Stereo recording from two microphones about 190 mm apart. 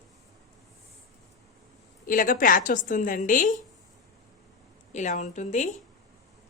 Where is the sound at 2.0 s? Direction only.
45° left (ahead or behind).